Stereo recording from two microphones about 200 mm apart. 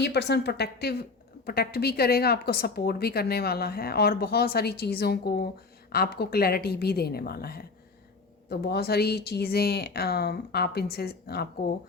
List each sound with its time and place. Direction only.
0.0 s a woman's voice: 55° left (ahead or behind)